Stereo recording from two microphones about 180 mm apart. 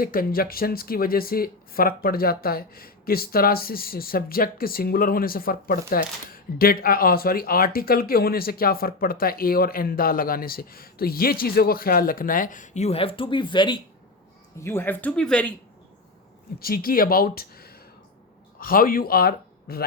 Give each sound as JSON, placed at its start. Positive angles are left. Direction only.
{"t": 0.0, "sound": "speech", "side_deg": 55}
{"t": 14.6, "sound": "speech", "side_deg": 15}
{"t": 16.6, "sound": "speech", "side_deg": 55}